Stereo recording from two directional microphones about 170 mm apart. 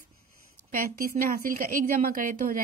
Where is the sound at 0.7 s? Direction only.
55° right (ahead or behind).